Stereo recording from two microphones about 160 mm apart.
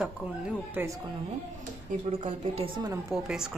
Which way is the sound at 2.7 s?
25° right (ahead or behind).